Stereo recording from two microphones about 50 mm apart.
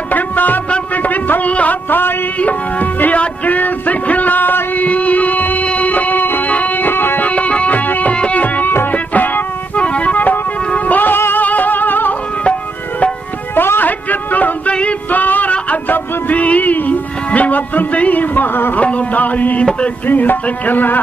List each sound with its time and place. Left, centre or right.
0.1 s music: left
0.7 s a sound: left
1.5 s music: left
1.9 s a sound: left
2.3 s music: left
4.8 s music: left
7.2 s music: left
9.8 s music: left
13.6 s a sound: left
14.7 s music: left
15.0 s male singing: left
15.5 s music: left
18.8 s music: left